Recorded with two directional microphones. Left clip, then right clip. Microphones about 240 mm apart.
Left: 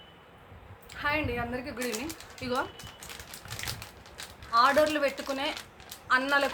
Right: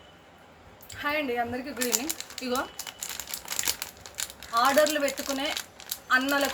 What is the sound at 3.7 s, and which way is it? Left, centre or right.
Crumpling, right.